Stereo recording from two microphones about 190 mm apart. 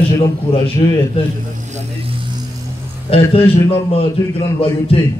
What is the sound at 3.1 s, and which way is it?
A man's voice, 30° left (ahead or behind).